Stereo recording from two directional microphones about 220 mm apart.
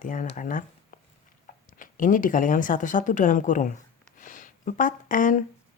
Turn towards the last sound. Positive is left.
turn(degrees=35)  # may be behind; listen again after turning